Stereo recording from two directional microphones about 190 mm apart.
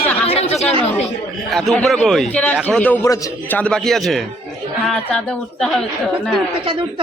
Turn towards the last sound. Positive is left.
turn(degrees=0)  # may be behind; listen again after turning